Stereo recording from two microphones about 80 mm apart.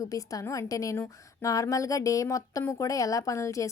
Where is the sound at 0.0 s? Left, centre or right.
Left.